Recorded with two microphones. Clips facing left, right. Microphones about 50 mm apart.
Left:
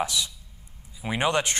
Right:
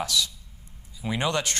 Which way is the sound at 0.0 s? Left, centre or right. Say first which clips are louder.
Even; left.